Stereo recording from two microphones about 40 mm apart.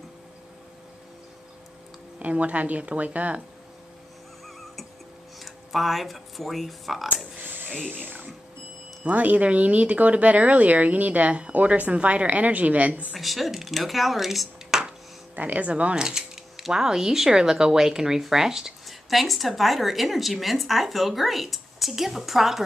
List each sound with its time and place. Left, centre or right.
2.1 s speech: right
5.4 s speech: centre
7.3 s a sound: right
7.9 s speech: right
13.1 s speech: centre
14.7 s a sound: centre
15.3 s speech: right
15.7 s speech: right
18.9 s speech: centre